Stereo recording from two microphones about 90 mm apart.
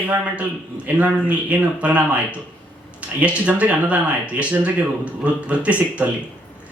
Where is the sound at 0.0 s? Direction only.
15° right (ahead or behind).